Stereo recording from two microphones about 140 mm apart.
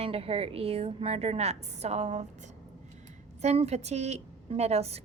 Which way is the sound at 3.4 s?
50° right (ahead or behind).